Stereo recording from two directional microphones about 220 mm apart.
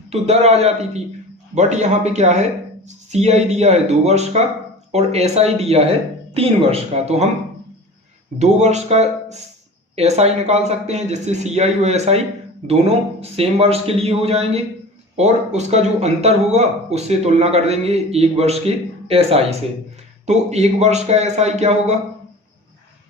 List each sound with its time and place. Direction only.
0.1 s a man's voice: 30° right (ahead or behind)
8.4 s a man's voice: 30° right (ahead or behind)